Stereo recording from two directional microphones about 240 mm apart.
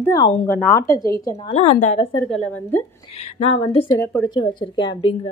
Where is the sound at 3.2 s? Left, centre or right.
Left.